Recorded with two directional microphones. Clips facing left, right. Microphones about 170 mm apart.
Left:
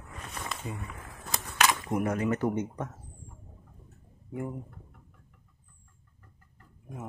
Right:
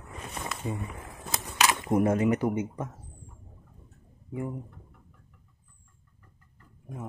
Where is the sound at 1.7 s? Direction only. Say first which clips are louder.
Right 5 dB; 25° right (ahead or behind); by 2.9 s 10° right (ahead or behind).